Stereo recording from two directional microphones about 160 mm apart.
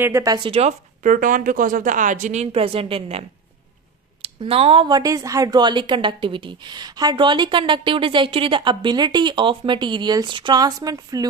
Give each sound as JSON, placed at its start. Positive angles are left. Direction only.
{"t": 0.0, "sound": "a woman's voice", "side_deg": -20}
{"t": 0.5, "sound": "a woman's voice", "side_deg": -45}